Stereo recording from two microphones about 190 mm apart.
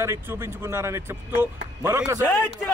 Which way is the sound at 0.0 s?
15° right (ahead or behind).